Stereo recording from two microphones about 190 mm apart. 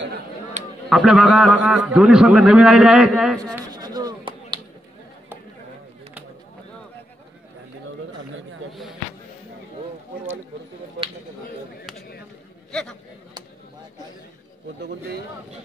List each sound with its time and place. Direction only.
0.8 s a man's voice: centre (ahead or behind)
3.4 s a sound: 20° right (ahead or behind)
14.8 s speech: 65° right (ahead or behind)